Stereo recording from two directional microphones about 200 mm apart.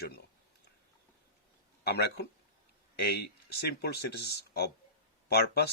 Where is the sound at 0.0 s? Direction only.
50° left (ahead or behind).